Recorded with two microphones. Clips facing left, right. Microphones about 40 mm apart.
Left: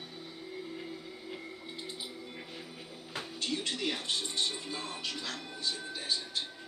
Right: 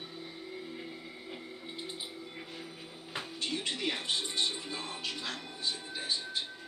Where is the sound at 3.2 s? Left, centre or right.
Centre.